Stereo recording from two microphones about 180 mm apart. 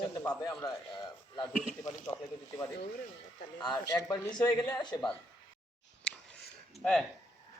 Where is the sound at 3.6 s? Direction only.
20° left (ahead or behind).